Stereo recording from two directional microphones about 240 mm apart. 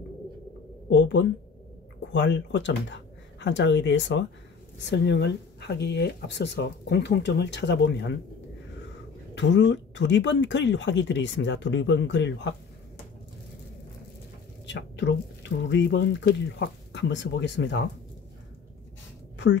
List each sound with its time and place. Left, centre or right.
0.8 s speech: left
9.3 s speech: left
14.7 s speech: left